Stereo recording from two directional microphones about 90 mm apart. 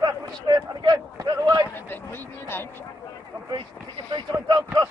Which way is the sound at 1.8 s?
25° left (ahead or behind).